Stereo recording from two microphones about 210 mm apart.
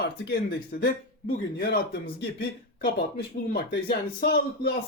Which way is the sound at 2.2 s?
50° left (ahead or behind).